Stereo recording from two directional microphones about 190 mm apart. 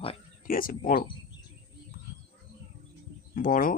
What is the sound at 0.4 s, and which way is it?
Speech, 45° left (ahead or behind).